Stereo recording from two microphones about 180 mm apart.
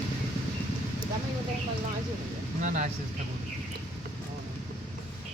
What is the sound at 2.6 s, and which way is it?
Speech, 45° right (ahead or behind).